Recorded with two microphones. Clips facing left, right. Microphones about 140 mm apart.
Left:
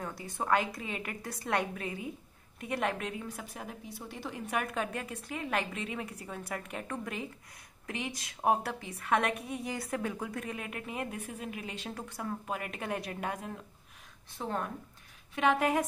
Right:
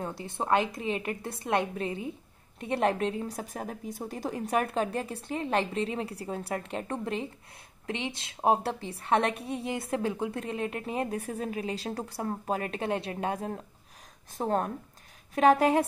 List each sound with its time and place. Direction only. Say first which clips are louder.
0.0 s a woman's voice: right 3 dB; 25° right (ahead or behind)